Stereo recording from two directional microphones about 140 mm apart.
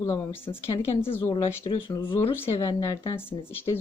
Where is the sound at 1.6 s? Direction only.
35° left (ahead or behind).